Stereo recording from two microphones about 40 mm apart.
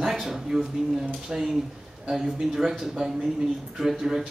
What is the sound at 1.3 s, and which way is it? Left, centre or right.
Speech, right.